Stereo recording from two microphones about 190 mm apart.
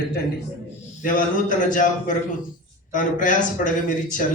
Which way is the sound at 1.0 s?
45° left (ahead or behind).